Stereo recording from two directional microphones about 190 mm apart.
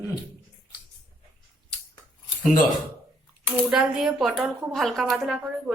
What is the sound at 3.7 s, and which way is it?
A woman's voice, 5° right (ahead or behind).